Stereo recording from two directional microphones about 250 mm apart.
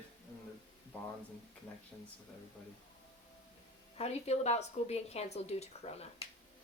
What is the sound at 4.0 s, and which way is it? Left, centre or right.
A woman's voice, left.